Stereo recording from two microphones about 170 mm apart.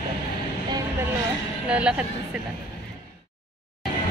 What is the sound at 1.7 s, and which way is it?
Speech, 5° right (ahead or behind).